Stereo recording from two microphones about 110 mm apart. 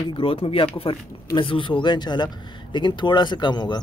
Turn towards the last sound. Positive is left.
turn(degrees=45)  # may be behind; listen again after turning